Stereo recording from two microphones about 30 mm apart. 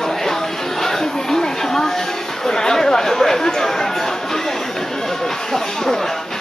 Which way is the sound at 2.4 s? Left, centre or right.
Left.